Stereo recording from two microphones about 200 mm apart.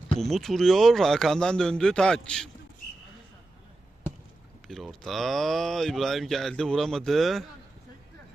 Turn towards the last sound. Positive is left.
turn(degrees=0)  # may be behind; listen again after turning